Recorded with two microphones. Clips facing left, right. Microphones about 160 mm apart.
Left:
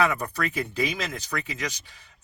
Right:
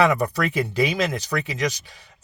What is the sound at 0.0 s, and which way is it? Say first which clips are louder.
Speech: right 6 dB; 80° right.